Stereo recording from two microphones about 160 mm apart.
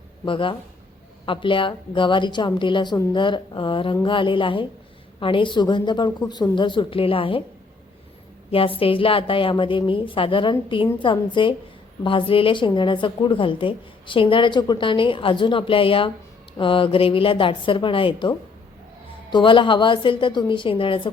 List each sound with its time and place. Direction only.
0.3 s a woman's voice: 30° left (ahead or behind)
8.4 s a woman's voice: 35° left (ahead or behind)